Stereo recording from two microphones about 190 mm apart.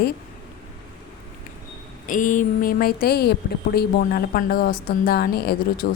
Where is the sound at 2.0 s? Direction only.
45° left (ahead or behind).